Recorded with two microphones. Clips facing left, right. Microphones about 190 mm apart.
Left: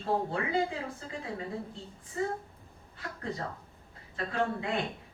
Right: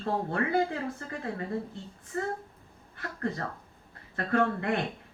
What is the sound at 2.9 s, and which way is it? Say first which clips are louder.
Speech: right 4 dB; 60° right (ahead or behind).